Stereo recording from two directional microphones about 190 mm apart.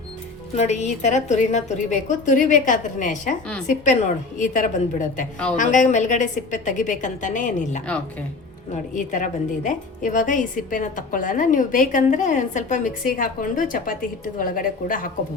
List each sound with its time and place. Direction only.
0.5 s a woman's voice: 35° left (ahead or behind)
4.4 s a woman's voice: 45° left (ahead or behind)